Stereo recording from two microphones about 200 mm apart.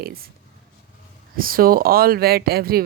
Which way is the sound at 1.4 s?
45° right (ahead or behind).